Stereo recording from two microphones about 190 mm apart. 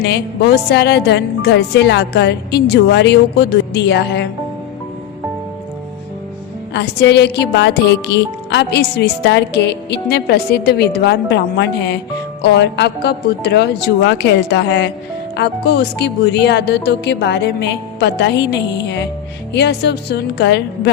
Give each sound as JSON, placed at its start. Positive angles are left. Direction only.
{"t": 0.0, "sound": "speech", "side_deg": 60}
{"t": 6.7, "sound": "speech", "side_deg": 65}